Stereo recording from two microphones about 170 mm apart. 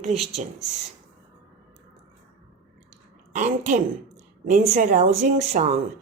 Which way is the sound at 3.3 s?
45° right (ahead or behind).